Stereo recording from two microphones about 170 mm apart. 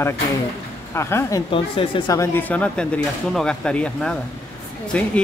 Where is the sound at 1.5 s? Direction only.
30° left (ahead or behind).